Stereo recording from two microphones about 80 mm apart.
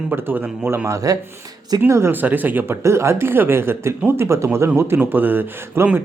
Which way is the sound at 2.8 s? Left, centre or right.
Right.